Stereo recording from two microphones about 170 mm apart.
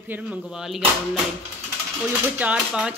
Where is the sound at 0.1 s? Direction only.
5° right (ahead or behind).